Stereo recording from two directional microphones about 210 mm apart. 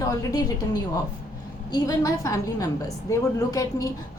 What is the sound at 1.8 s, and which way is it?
A woman's voice, 15° left (ahead or behind).